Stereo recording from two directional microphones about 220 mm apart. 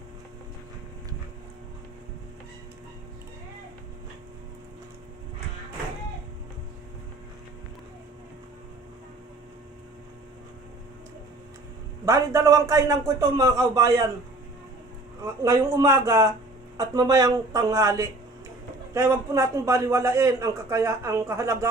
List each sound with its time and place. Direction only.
12.0 s a man's voice: 15° right (ahead or behind)
15.2 s a man's voice: 15° right (ahead or behind)